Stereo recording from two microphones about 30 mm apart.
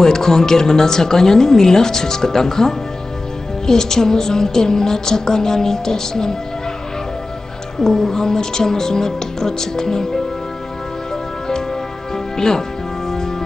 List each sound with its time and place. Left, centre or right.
0.0 s a woman's voice: centre
7.8 s speech: centre
12.4 s speech: centre